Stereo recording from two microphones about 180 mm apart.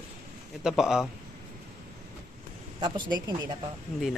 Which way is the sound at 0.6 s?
5° right (ahead or behind).